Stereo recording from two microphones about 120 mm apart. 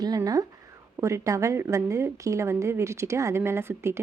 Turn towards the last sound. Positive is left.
turn(degrees=-20)  # may be behind; listen again after turning